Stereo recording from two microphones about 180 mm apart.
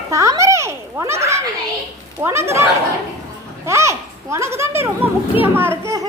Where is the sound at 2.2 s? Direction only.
15° right (ahead or behind).